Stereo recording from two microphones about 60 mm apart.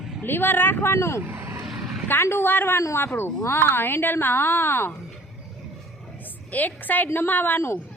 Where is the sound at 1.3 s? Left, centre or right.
Right.